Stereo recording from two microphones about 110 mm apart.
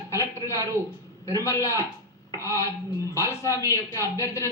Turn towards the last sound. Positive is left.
turn(degrees=25)  # may be behind; listen again after turning